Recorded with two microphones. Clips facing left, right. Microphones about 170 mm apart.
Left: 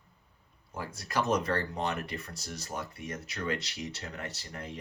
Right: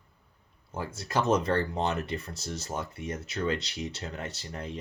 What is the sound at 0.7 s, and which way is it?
Speech, 25° right (ahead or behind).